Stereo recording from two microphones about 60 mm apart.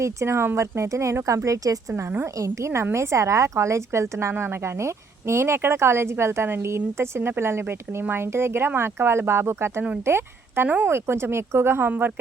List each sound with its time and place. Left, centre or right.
0.0 s a woman's voice: right
2.9 s a woman's voice: right